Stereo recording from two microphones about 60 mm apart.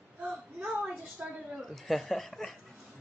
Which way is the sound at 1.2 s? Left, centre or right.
Right.